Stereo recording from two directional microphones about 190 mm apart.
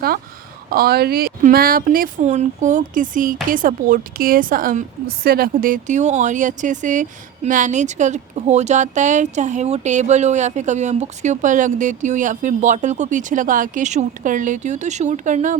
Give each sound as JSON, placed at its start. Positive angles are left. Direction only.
{"t": 0.7, "sound": "a woman's voice", "side_deg": -55}